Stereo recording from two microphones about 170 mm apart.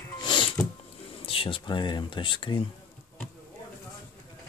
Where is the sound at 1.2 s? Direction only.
30° left (ahead or behind).